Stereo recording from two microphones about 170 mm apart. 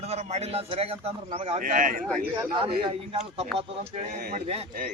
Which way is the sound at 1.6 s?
50° right (ahead or behind).